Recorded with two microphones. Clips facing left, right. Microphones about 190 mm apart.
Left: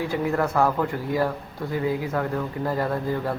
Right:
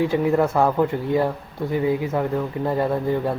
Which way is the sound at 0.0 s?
20° right (ahead or behind).